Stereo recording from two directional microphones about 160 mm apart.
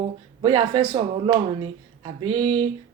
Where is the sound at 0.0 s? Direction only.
35° right (ahead or behind).